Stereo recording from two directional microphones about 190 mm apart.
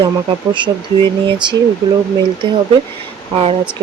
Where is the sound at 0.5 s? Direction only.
25° right (ahead or behind).